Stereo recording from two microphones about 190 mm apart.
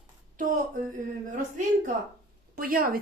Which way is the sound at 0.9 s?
40° right (ahead or behind).